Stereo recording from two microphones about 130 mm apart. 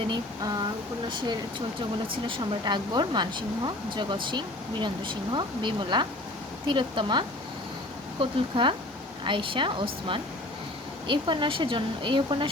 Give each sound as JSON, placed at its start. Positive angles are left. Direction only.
{"t": 1.1, "sound": "speech", "side_deg": -40}